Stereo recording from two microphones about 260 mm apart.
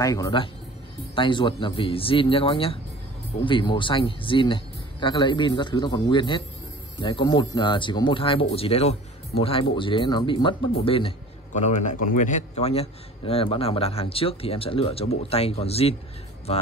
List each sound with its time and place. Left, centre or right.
0.0 s a man's voice: centre